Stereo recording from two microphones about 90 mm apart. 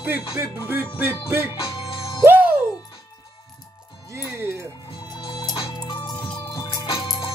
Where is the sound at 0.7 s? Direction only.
20° right (ahead or behind).